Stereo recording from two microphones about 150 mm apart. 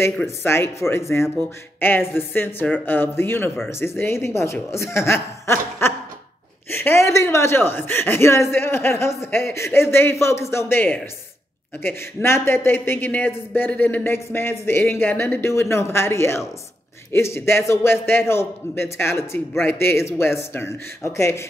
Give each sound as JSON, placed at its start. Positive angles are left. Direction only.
{"t": 0.0, "sound": "a man's voice", "side_deg": 15}